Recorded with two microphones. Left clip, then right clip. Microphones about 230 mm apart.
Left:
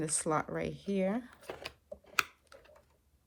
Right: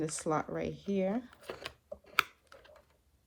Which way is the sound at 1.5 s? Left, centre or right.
Centre.